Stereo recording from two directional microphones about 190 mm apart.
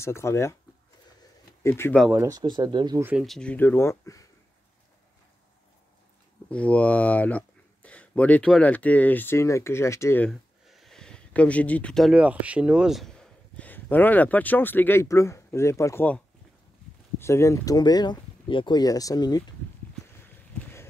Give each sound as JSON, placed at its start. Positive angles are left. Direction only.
{"t": 0.0, "sound": "speech", "side_deg": 15}
{"t": 1.6, "sound": "speech", "side_deg": 15}
{"t": 2.0, "sound": "speech", "side_deg": -15}
{"t": 3.0, "sound": "speech", "side_deg": -10}
{"t": 3.3, "sound": "speech", "side_deg": 5}
{"t": 6.5, "sound": "speech", "side_deg": 5}
{"t": 10.7, "sound": "speech", "side_deg": 0}
{"t": 17.2, "sound": "speech", "side_deg": 15}